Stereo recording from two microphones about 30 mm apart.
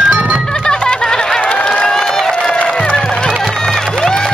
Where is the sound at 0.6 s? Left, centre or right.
Left.